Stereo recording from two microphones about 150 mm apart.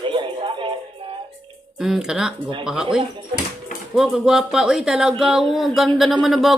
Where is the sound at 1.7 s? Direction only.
Centre (ahead or behind).